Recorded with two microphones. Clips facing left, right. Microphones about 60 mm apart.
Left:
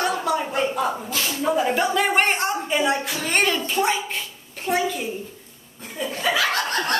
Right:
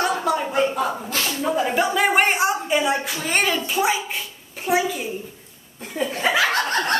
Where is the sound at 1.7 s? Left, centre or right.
Centre.